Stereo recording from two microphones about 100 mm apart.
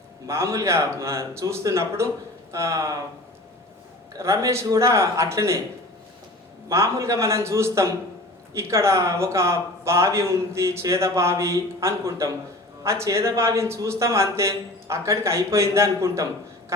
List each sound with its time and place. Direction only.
0.3 s a man's voice: 30° right (ahead or behind)
4.2 s a man's voice: 30° right (ahead or behind)
6.7 s a man's voice: 30° right (ahead or behind)